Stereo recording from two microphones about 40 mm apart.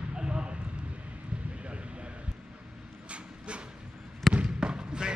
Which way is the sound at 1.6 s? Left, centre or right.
Right.